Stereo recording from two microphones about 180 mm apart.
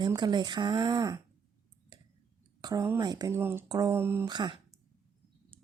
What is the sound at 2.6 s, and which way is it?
Speech, 20° right (ahead or behind).